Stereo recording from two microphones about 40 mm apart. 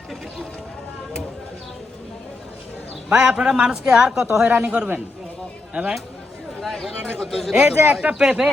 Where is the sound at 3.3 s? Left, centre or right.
Right.